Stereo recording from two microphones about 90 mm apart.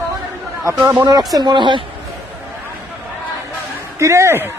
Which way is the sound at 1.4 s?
60° right (ahead or behind).